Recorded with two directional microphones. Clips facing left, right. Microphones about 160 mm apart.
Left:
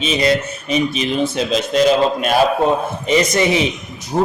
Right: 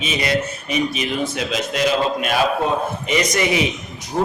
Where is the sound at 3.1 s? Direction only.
30° left (ahead or behind).